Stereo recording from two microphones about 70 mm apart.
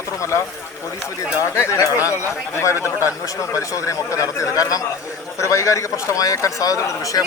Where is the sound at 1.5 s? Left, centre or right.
Left.